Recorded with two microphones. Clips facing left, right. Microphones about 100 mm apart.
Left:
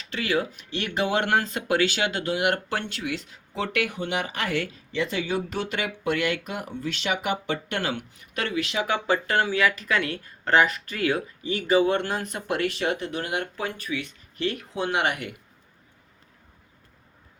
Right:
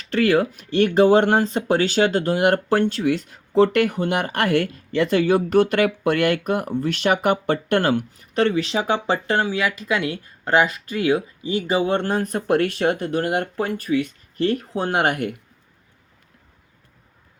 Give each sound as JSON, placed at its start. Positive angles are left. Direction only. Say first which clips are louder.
{"t": 0.0, "sound": "speech", "louder": "right 8 dB", "side_deg": -50}